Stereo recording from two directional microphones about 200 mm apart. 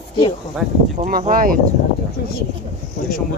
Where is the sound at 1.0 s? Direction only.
40° right (ahead or behind).